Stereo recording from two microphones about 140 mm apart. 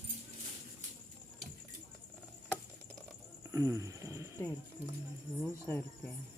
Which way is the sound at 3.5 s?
25° right (ahead or behind).